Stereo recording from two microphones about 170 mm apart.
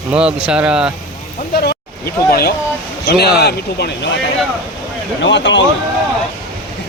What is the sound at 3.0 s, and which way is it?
Speech, 70° left (ahead or behind).